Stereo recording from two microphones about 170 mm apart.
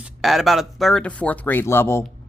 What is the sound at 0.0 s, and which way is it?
Speech, centre (ahead or behind).